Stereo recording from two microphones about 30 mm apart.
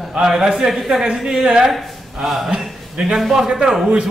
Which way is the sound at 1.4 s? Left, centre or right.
Right.